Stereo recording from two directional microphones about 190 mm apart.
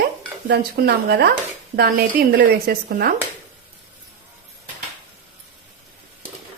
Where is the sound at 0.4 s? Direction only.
55° right (ahead or behind).